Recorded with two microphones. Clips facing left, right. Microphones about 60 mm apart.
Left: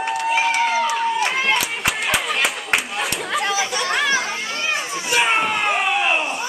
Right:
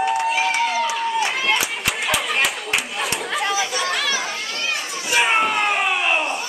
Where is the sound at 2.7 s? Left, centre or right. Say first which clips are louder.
Left 1 dB; centre.